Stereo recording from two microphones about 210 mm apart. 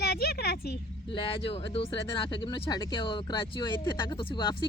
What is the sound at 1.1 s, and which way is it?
Speech, 25° left (ahead or behind).